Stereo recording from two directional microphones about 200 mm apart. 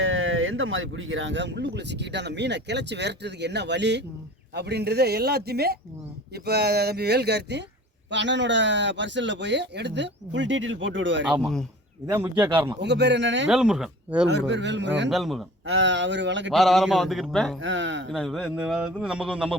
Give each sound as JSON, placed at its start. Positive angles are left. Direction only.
{"t": 0.0, "sound": "speech", "side_deg": -75}
{"t": 11.3, "sound": "a man's voice", "side_deg": 0}
{"t": 12.8, "sound": "speech", "side_deg": -60}
{"t": 13.5, "sound": "a man's voice", "side_deg": -5}
{"t": 14.3, "sound": "speech", "side_deg": -60}
{"t": 15.1, "sound": "a man's voice", "side_deg": 0}
{"t": 15.6, "sound": "speech", "side_deg": -70}
{"t": 16.5, "sound": "a man's voice", "side_deg": 0}
{"t": 17.6, "sound": "speech", "side_deg": -65}
{"t": 18.1, "sound": "a man's voice", "side_deg": 0}